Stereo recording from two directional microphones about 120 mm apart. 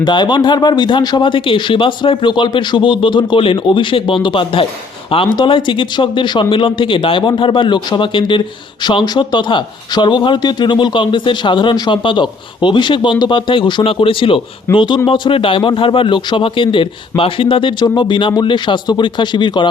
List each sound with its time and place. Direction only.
0.0 s speech: 40° left (ahead or behind)